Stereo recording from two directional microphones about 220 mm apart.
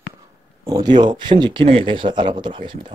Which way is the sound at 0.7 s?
20° right (ahead or behind).